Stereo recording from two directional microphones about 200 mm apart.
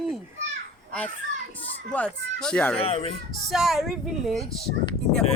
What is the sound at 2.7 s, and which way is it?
Speech, 30° left (ahead or behind).